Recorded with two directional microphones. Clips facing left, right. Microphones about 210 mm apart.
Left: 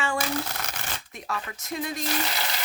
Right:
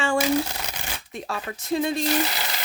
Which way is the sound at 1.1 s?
30° right (ahead or behind).